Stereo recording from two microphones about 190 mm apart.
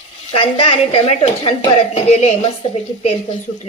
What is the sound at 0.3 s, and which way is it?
Speech, 25° left (ahead or behind).